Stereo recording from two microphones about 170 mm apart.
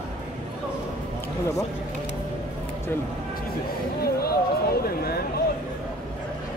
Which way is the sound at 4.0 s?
65° left (ahead or behind).